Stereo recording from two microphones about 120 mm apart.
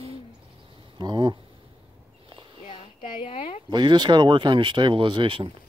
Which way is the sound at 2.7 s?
40° left (ahead or behind).